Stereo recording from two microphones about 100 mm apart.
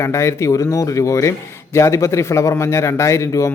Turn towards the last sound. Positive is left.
turn(degrees=30)  # may be behind; listen again after turning